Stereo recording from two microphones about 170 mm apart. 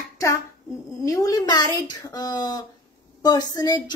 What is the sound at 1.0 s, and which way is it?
A child's voice, 20° left (ahead or behind).